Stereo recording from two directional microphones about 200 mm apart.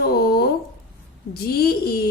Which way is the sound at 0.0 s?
50° left (ahead or behind).